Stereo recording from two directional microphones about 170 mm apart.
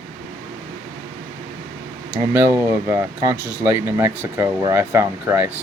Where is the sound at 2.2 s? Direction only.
15° right (ahead or behind).